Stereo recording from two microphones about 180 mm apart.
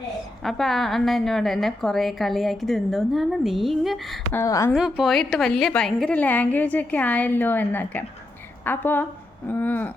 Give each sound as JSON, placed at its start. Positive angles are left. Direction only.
{"t": 0.4, "sound": "a woman's voice", "side_deg": 0}
{"t": 4.4, "sound": "a woman's voice", "side_deg": 15}
{"t": 4.7, "sound": "a woman's voice", "side_deg": 0}